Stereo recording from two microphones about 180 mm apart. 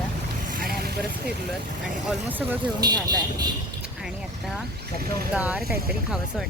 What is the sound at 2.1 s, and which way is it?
Speech, 10° right (ahead or behind).